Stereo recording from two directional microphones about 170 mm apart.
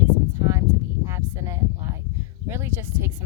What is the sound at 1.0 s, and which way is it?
Speech, 15° right (ahead or behind).